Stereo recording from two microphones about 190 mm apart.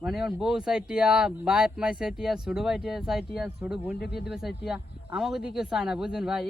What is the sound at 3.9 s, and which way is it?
Speech, 60° left (ahead or behind).